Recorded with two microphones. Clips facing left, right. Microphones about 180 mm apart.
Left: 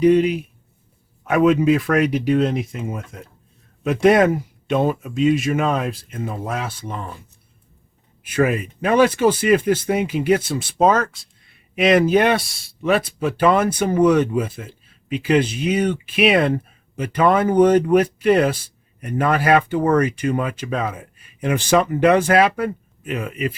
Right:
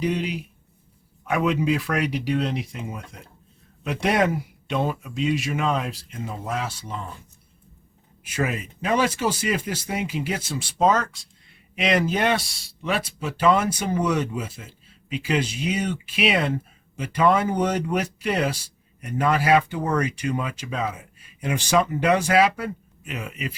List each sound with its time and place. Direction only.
0.0 s speech: 50° left (ahead or behind)
8.2 s speech: 55° left (ahead or behind)